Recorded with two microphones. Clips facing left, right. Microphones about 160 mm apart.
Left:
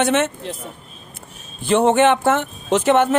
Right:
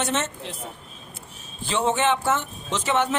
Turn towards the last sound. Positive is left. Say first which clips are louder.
# left 8 dB
turn(degrees=55)  # may be behind; listen again after turning